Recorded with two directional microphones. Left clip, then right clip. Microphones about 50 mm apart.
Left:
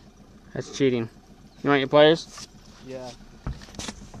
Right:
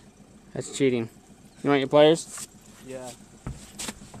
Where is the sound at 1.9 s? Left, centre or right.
Right.